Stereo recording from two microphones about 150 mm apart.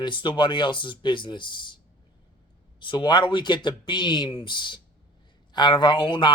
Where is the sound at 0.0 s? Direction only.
30° left (ahead or behind).